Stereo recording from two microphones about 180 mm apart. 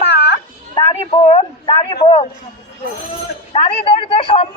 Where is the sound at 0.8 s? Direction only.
35° left (ahead or behind).